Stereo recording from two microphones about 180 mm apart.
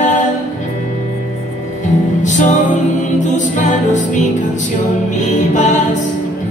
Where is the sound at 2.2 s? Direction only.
45° left (ahead or behind).